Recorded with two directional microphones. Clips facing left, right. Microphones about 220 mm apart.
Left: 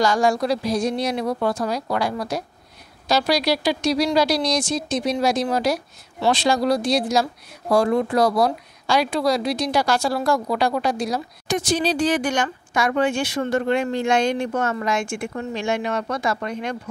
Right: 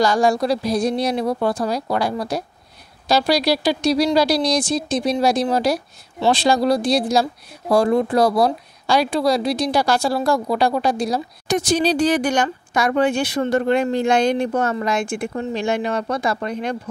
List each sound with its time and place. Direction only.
0.0 s speech: 35° right (ahead or behind)